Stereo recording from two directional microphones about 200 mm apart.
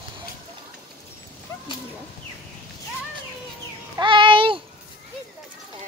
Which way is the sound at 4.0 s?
25° right (ahead or behind).